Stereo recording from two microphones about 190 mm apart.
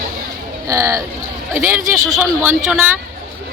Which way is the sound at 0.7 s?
15° right (ahead or behind).